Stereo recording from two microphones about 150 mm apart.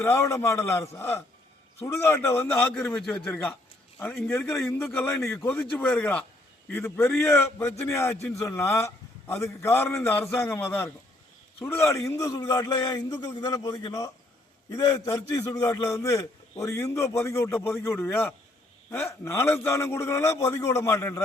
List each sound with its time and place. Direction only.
0.0 s a man's voice: 15° left (ahead or behind)